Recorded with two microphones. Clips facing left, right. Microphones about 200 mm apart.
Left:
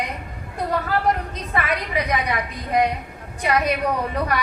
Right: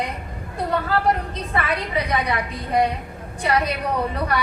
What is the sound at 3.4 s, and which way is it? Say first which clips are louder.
Speech: even; 30° right (ahead or behind).